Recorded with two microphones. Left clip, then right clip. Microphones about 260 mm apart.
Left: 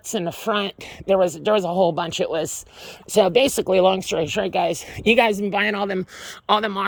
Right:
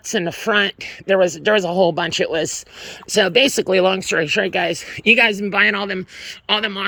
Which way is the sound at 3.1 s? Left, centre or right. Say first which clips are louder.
Even; left.